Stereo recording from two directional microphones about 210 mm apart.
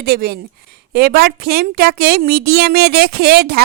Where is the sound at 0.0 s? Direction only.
45° right (ahead or behind).